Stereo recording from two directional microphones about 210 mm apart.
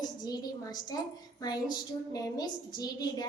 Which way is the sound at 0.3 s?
20° left (ahead or behind).